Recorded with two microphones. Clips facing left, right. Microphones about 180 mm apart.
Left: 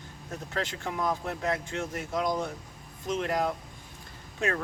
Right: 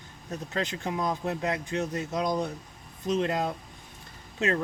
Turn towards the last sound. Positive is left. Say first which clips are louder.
# right 3 dB
turn(degrees=-20)  # may be behind; listen again after turning